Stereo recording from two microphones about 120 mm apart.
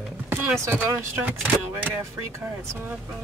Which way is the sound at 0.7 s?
20° right (ahead or behind).